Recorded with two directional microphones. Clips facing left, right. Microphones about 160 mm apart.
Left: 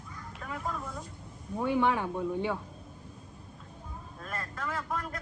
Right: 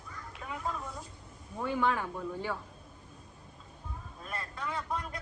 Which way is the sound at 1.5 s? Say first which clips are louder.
Left 3 dB; 20° left (ahead or behind).